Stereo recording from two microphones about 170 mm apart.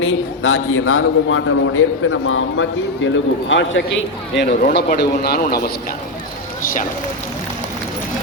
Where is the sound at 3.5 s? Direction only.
90° left.